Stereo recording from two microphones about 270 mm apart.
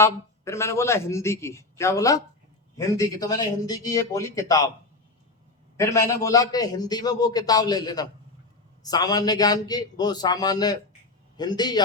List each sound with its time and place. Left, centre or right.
0.0 s a man's voice: centre
5.7 s a man's voice: centre